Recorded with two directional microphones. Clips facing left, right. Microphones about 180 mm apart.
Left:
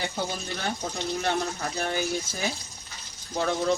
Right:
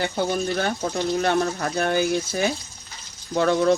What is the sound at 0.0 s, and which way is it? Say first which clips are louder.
Speech: right 8 dB; 60° right (ahead or behind).